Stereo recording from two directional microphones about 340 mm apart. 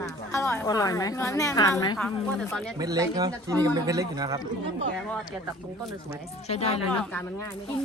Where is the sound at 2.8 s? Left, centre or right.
Centre.